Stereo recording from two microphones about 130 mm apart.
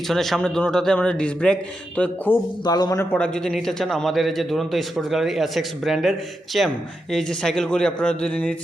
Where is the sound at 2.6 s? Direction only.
30° left (ahead or behind).